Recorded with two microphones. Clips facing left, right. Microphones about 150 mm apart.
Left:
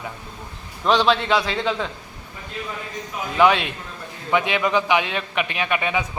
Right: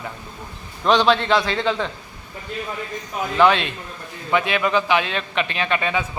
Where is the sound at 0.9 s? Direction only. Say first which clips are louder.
Right 1 dB; 5° left (ahead or behind).